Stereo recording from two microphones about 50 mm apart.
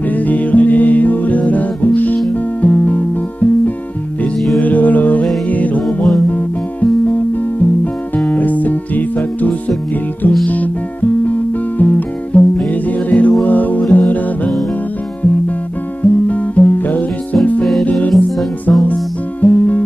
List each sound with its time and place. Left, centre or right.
0.1 s music: left
16.0 s music: left
18.7 s music: left